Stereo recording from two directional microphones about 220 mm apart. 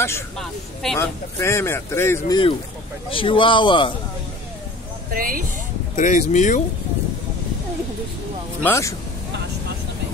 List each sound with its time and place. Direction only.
0.0 s a man's voice: 10° left (ahead or behind)
5.1 s speech: 40° right (ahead or behind)
5.9 s speech: 35° left (ahead or behind)
8.6 s speech: 10° left (ahead or behind)